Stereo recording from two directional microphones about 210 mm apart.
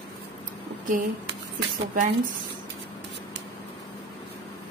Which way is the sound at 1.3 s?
55° right (ahead or behind).